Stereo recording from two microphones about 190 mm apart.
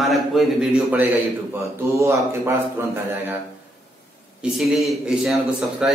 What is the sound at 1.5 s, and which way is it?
Speech, 15° right (ahead or behind).